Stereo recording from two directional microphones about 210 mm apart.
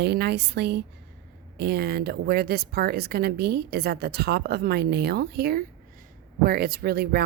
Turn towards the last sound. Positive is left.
turn(degrees=-45)  # may be behind; listen again after turning